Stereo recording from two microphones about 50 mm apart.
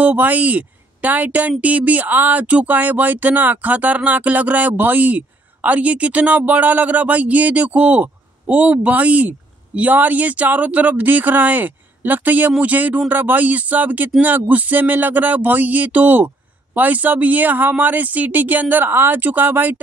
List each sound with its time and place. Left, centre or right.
0.0 s speech: right